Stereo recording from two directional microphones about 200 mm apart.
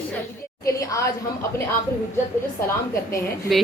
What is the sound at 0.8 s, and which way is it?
Speech, 15° left (ahead or behind).